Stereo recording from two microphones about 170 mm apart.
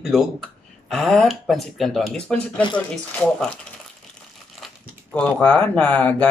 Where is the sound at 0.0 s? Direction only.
Centre (ahead or behind).